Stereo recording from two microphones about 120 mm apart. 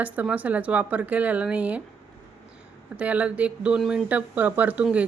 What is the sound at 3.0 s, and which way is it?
Speech, 10° right (ahead or behind).